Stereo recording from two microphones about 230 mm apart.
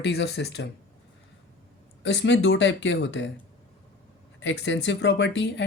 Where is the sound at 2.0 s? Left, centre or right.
Left.